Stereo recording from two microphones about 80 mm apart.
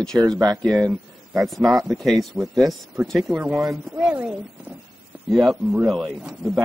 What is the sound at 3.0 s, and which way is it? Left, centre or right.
Speech, centre.